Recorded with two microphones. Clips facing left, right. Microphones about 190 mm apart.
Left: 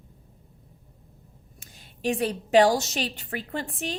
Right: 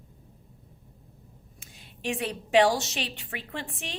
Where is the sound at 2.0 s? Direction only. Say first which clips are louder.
Left 5 dB; 40° left (ahead or behind).